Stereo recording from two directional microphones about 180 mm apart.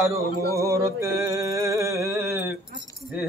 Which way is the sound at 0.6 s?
15° right (ahead or behind).